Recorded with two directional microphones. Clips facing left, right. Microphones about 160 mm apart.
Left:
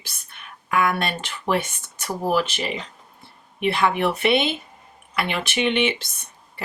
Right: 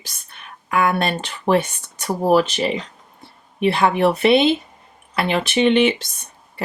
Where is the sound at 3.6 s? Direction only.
35° right (ahead or behind).